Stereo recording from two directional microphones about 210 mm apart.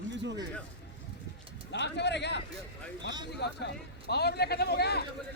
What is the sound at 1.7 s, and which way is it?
Speech, 55° left (ahead or behind).